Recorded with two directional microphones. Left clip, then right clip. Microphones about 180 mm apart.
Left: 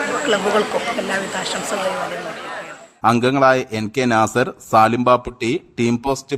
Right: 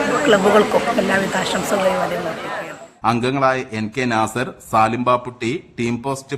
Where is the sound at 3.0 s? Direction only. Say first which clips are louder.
Left 3 dB; 40° left (ahead or behind).